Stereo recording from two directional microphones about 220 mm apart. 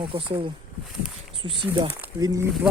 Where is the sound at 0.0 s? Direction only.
20° right (ahead or behind).